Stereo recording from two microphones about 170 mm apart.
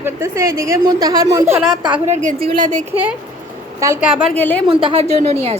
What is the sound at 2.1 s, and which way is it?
A woman's voice, 45° right (ahead or behind).